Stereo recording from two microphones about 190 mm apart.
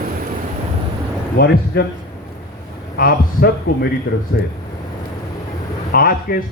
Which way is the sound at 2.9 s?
50° left (ahead or behind).